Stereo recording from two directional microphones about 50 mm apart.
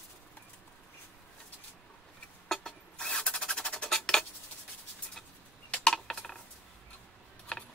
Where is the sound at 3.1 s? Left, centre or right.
Left.